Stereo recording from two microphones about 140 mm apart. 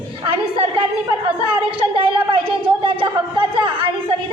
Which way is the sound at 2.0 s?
40° right (ahead or behind).